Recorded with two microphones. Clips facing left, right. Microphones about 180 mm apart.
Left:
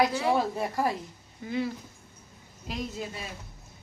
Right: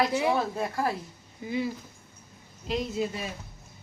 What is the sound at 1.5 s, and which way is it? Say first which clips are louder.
Speech: even; 5° right (ahead or behind).